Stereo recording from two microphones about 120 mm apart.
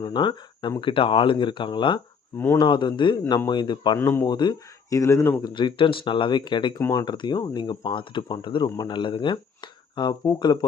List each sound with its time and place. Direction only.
0.0 s speech: 40° left (ahead or behind)
3.9 s speech: 20° left (ahead or behind)
4.3 s speech: 35° left (ahead or behind)
5.4 s speech: 40° left (ahead or behind)